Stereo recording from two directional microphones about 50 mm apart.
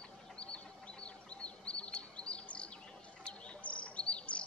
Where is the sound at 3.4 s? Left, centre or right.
Left.